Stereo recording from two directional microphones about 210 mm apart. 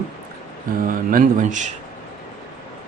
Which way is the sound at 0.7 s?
40° right (ahead or behind).